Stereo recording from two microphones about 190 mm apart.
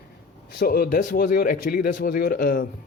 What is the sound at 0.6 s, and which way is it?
Speech, 50° left (ahead or behind).